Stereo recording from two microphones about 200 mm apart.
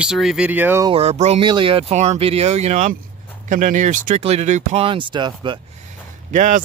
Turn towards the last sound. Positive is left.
turn(degrees=-40)  # may be behind; listen again after turning